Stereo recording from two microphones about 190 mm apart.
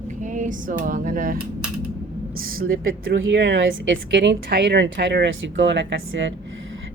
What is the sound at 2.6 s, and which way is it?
A woman's voice, 90° right.